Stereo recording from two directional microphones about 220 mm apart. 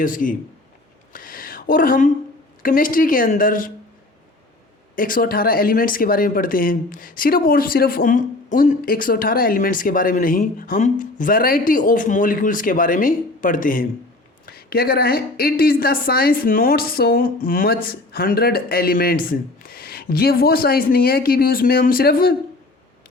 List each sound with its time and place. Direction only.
0.0 s speech: 40° left (ahead or behind)
1.1 s a sound: 40° left (ahead or behind)
2.6 s speech: 40° left (ahead or behind)
4.9 s a woman's voice: 40° left (ahead or behind)